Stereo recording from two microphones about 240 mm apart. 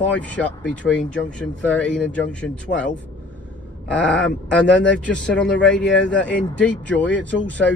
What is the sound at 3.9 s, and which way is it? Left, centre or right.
Speech, centre.